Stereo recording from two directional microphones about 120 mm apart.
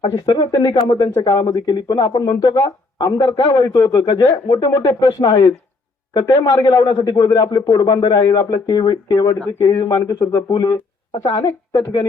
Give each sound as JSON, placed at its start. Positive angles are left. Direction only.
{"t": 0.0, "sound": "speech", "side_deg": 35}